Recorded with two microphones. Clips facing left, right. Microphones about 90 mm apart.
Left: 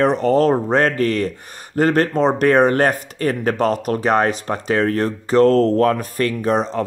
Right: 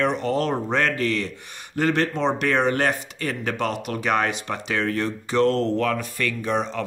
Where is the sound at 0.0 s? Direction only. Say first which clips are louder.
Left 8 dB; 40° left (ahead or behind).